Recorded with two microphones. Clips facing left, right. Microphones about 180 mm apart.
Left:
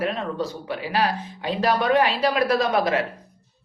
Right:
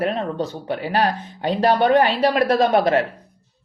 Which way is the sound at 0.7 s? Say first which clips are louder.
Right 4 dB; 45° right (ahead or behind).